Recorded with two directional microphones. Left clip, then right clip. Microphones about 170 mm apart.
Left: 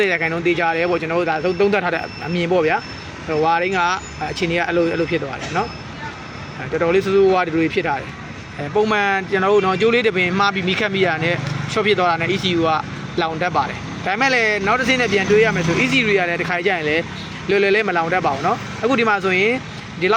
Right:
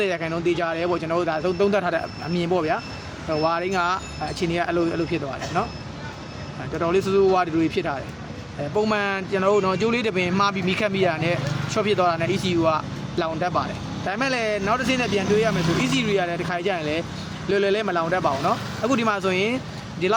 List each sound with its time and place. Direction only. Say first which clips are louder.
0.0 s speech: left 6 dB; 5° left (ahead or behind)
6.7 s speech: left 5 dB; 5° left (ahead or behind)